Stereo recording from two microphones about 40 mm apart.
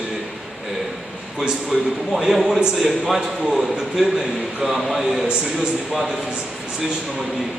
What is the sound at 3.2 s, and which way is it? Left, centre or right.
Speech, centre.